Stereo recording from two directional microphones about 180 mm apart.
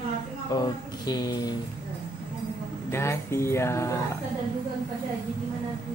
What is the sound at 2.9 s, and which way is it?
Speech, 15° left (ahead or behind).